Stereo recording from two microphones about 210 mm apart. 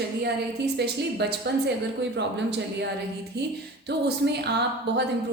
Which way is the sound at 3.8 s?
50° right (ahead or behind).